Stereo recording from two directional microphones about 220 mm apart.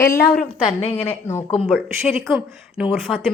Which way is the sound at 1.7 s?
5° right (ahead or behind).